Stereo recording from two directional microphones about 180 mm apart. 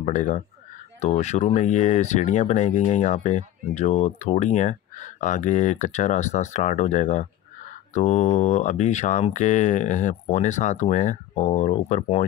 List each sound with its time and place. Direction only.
0.0 s speech: 45° left (ahead or behind)